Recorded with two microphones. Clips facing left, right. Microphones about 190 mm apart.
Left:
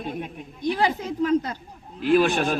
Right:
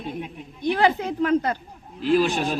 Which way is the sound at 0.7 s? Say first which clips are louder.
Right 3 dB; 65° right (ahead or behind).